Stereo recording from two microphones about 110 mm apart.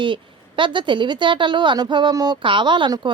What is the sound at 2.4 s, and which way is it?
Speech, 50° right (ahead or behind).